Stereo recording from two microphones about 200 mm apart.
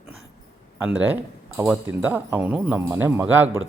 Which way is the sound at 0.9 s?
10° right (ahead or behind).